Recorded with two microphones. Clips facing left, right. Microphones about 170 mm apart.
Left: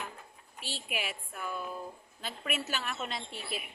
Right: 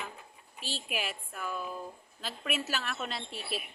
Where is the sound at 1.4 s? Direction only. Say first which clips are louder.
Right 1 dB; 15° left (ahead or behind).